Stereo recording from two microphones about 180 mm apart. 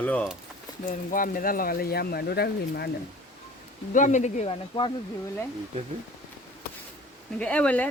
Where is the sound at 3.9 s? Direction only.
45° left (ahead or behind).